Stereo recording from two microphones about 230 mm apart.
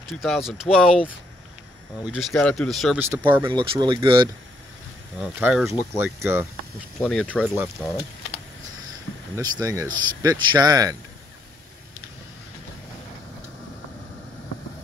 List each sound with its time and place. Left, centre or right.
0.2 s speech: centre
2.0 s speech: centre
3.4 s speech: centre
5.2 s speech: centre
9.1 s a sound: left
9.4 s speech: centre